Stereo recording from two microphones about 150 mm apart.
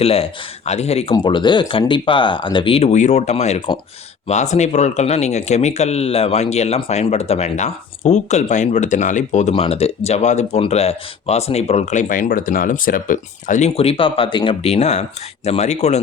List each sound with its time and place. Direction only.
0.0 s speech: 40° left (ahead or behind)
1.1 s speech: 30° left (ahead or behind); by 16.0 s 50° left (ahead or behind)